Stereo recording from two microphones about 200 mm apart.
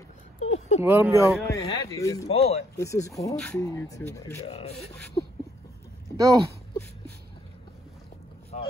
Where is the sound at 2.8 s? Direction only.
15° left (ahead or behind).